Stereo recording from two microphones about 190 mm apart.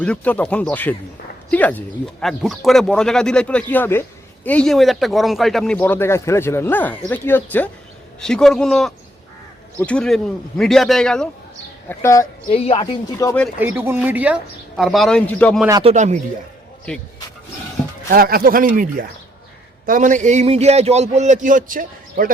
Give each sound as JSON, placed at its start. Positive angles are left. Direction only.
{"t": 0.0, "sound": "speech", "side_deg": 5}
{"t": 11.9, "sound": "speech", "side_deg": 15}
{"t": 12.5, "sound": "speech", "side_deg": 30}
{"t": 13.2, "sound": "speech", "side_deg": 15}
{"t": 13.6, "sound": "speech", "side_deg": -10}
{"t": 15.8, "sound": "a man's voice", "side_deg": -35}
{"t": 18.1, "sound": "a man's voice", "side_deg": -50}